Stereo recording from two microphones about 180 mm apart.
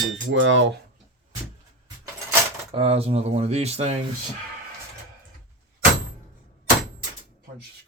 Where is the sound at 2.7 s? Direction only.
35° right (ahead or behind).